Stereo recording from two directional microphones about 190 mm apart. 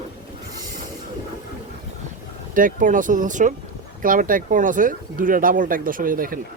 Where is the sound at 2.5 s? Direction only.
45° right (ahead or behind).